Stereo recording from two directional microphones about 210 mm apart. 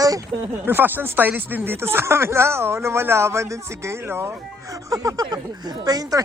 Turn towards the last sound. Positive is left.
turn(degrees=-15)  # may be behind; listen again after turning